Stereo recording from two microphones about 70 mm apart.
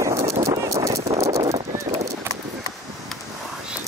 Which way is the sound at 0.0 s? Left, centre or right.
Right.